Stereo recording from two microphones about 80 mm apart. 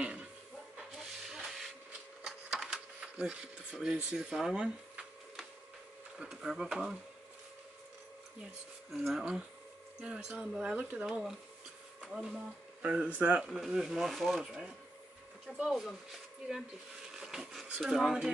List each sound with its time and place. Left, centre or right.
0.7 s rub: centre
2.2 s a sound: centre
6.1 s speech: centre
8.9 s speech: centre
10.0 s speech: centre
11.1 s speech: centre
12.8 s speech: centre
13.4 s speech: centre
17.1 s a sound: centre